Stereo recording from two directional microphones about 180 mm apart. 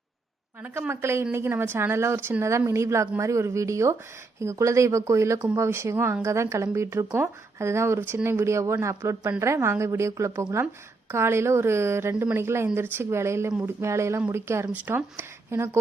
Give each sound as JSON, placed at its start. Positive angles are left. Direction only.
{"t": 0.6, "sound": "speech", "side_deg": -15}